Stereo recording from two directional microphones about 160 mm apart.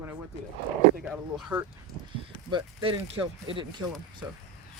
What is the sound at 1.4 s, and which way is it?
Speech, 5° right (ahead or behind).